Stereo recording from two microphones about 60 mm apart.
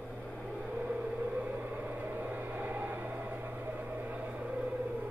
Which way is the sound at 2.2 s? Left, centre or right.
Right.